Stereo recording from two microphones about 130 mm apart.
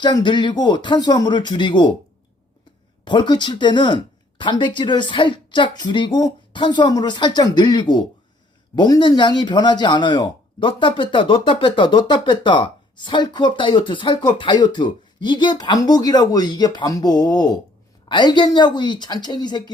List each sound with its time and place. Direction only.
0.0 s speech: 35° left (ahead or behind)
3.0 s speech: 35° left (ahead or behind)